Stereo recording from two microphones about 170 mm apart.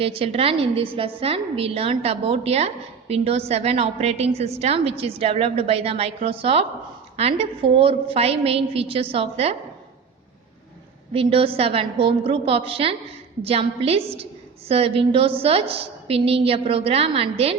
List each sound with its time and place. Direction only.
0.0 s a woman's voice: 35° right (ahead or behind)
11.1 s a woman's voice: 35° right (ahead or behind)